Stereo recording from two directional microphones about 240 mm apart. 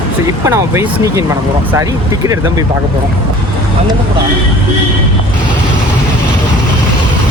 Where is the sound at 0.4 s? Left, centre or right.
Centre.